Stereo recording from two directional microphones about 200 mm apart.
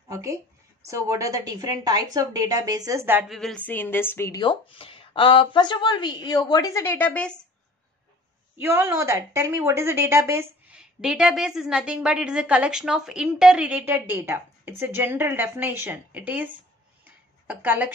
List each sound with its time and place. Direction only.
0.1 s a sound: 15° right (ahead or behind)
0.8 s a woman's voice: 15° right (ahead or behind)
3.3 s a woman's voice: 5° left (ahead or behind)
8.5 s a woman's voice: 10° right (ahead or behind)
17.5 s a woman's voice: 10° right (ahead or behind)